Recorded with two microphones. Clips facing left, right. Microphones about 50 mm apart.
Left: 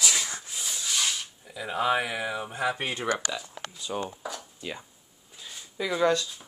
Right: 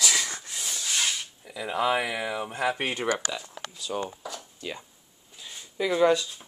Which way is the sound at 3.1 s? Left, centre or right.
Centre.